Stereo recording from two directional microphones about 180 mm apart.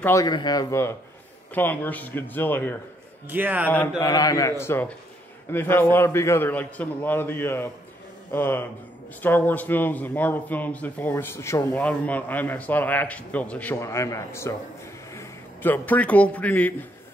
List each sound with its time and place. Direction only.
0.0 s a man's voice: 20° left (ahead or behind)
3.3 s speech: 10° right (ahead or behind)
4.0 s a man's voice: 20° left (ahead or behind)